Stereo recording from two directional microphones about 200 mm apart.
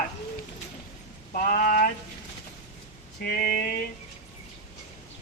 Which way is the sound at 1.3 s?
45° left (ahead or behind).